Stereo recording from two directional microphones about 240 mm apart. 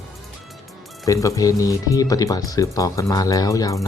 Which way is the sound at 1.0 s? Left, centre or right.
Centre.